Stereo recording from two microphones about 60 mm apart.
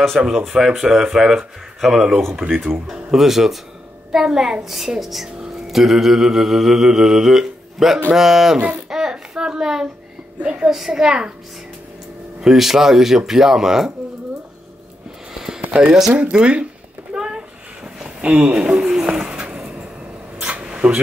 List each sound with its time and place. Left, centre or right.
0.2 s speech: centre
5.7 s mantra: centre
8.5 s speech: right
8.9 s a sound: centre
10.4 s speech: centre
12.4 s speech: centre
15.7 s speech: centre
17.1 s a sound: centre